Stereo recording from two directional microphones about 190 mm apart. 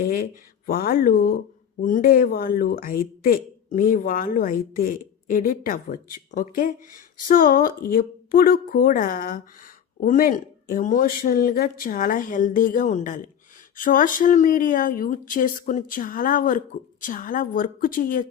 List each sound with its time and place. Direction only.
0.1 s speech: 50° left (ahead or behind)